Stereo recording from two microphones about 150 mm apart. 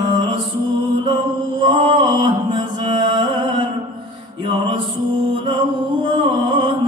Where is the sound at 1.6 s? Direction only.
35° right (ahead or behind).